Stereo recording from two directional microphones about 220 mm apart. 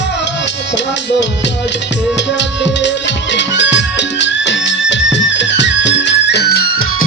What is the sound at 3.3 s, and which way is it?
Music, 55° left (ahead or behind).